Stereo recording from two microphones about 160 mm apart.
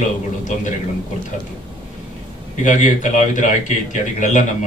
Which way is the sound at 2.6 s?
55° left (ahead or behind).